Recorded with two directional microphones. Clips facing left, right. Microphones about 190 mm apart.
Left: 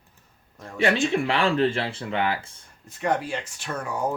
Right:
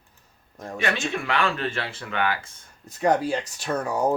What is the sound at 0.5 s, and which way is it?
Speech, 40° right (ahead or behind).